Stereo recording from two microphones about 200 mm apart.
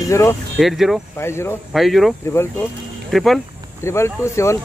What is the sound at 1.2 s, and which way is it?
Speech, 15° left (ahead or behind).